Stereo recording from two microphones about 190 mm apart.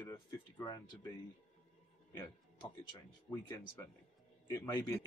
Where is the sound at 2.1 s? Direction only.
20° left (ahead or behind).